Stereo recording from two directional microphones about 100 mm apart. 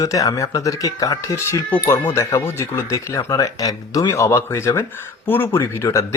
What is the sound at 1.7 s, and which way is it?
Speech, 20° left (ahead or behind).